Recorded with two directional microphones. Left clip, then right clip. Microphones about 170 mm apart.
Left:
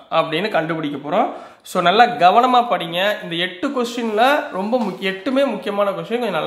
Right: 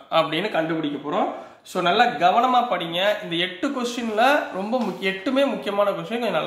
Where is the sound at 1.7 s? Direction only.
40° left (ahead or behind).